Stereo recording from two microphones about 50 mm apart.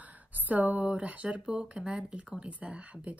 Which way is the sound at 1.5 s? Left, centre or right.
Centre.